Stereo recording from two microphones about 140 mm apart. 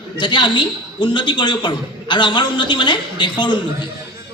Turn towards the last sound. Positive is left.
turn(degrees=35)  # may be behind; listen again after turning